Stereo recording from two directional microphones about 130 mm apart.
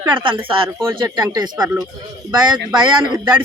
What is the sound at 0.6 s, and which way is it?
Speech, 20° right (ahead or behind).